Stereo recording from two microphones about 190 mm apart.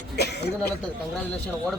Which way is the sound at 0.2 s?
60° left (ahead or behind).